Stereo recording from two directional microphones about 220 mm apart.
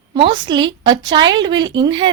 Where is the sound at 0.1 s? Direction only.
20° right (ahead or behind).